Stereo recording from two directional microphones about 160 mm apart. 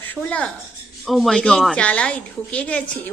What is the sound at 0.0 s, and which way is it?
A woman's voice, 10° left (ahead or behind).